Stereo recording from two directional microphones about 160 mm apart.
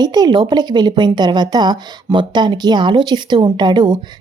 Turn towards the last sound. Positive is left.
turn(degrees=-25)  # may be behind; listen again after turning